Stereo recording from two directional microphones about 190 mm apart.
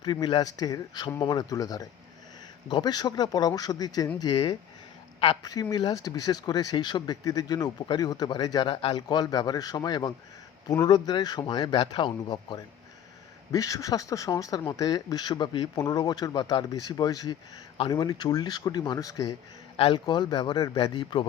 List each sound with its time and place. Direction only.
0.0 s speech: 20° left (ahead or behind)